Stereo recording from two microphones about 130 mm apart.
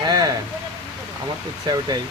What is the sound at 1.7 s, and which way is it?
Speech, 30° right (ahead or behind).